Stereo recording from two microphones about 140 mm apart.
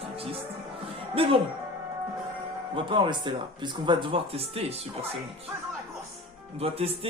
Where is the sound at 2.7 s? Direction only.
35° right (ahead or behind).